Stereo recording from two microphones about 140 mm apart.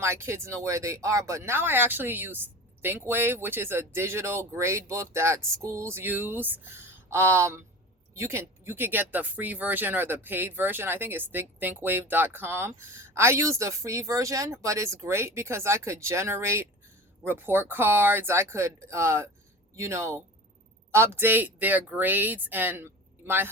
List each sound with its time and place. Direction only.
0.0 s speech: 20° right (ahead or behind)